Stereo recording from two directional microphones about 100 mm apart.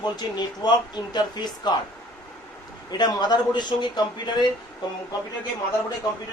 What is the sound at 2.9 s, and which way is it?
Speech, 45° left (ahead or behind).